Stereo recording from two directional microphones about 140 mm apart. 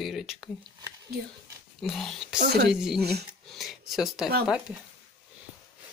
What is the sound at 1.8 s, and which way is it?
Speech, 5° left (ahead or behind).